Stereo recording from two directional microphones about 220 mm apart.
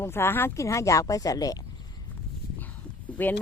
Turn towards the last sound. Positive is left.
turn(degrees=10)  # may be behind; listen again after turning